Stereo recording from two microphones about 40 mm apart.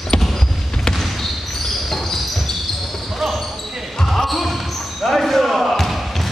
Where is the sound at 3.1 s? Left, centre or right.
Centre.